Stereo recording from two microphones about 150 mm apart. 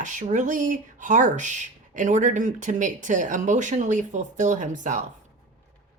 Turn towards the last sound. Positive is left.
turn(degrees=-60)  # may be behind; listen again after turning